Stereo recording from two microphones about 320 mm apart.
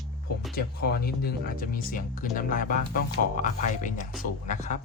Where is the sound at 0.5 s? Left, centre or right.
Left.